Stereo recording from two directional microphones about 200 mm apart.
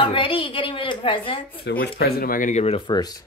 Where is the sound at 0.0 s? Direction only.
25° left (ahead or behind).